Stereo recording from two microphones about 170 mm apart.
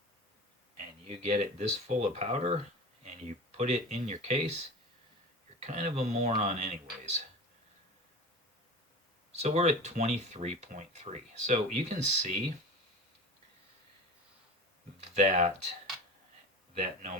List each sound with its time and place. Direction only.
1.0 s speech: 40° right (ahead or behind)
5.5 s speech: 40° right (ahead or behind)
9.3 s speech: 40° right (ahead or behind)
15.1 s speech: 40° right (ahead or behind)
16.7 s speech: 45° right (ahead or behind)